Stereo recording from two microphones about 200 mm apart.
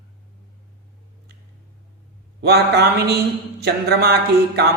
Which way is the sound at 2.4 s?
55° right (ahead or behind).